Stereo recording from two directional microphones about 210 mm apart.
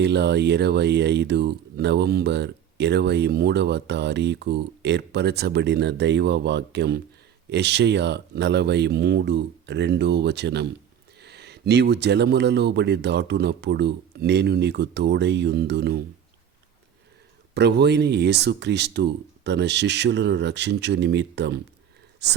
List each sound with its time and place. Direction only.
0.0 s speech: 55° right (ahead or behind)
17.5 s speech: 50° right (ahead or behind)